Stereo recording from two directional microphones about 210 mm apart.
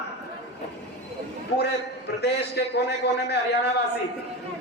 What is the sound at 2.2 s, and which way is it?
A man's voice, 50° left (ahead or behind).